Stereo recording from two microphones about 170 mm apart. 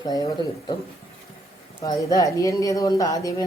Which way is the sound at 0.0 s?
20° left (ahead or behind).